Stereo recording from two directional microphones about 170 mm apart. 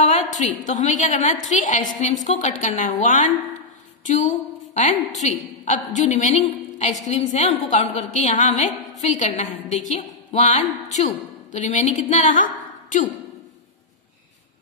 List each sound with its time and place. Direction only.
0.0 s a woman's voice: 45° left (ahead or behind)